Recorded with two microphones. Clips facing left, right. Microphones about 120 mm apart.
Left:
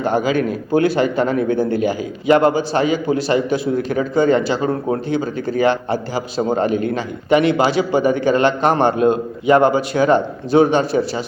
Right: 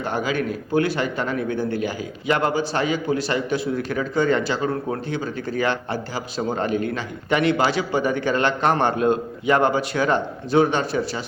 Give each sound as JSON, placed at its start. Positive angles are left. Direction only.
{"t": 0.0, "sound": "speech", "side_deg": 25}